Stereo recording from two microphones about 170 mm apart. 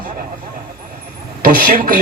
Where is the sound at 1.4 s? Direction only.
55° right (ahead or behind).